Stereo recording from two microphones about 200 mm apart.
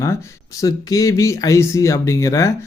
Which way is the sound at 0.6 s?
15° left (ahead or behind).